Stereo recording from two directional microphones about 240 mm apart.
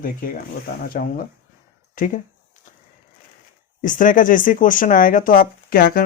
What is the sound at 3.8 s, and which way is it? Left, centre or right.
Speech, left.